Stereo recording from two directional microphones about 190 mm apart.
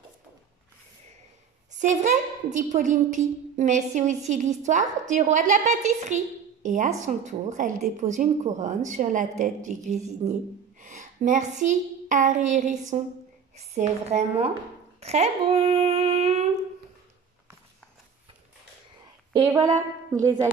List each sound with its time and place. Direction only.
1.7 s a sound: 40° right (ahead or behind)
2.5 s a woman's voice: 40° right (ahead or behind)
19.3 s speech: 20° right (ahead or behind)
20.1 s music: 15° right (ahead or behind)